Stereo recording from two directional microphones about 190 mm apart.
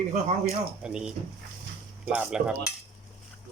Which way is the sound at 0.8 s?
5° right (ahead or behind).